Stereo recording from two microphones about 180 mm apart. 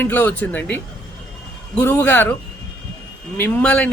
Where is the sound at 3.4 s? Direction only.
10° left (ahead or behind).